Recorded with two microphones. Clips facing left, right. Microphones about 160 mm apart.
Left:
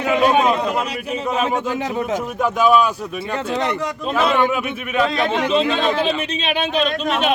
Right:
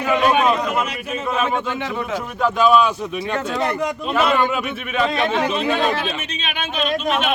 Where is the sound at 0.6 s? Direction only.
35° left (ahead or behind).